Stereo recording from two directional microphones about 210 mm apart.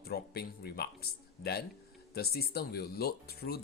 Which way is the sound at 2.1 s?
50° left (ahead or behind).